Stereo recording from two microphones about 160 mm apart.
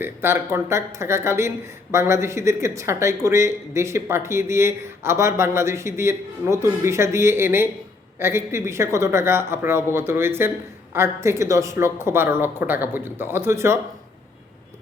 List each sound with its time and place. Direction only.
0.0 s speech: 15° right (ahead or behind)